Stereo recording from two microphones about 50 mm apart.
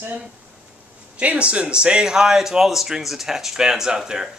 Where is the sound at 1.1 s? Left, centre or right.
Right.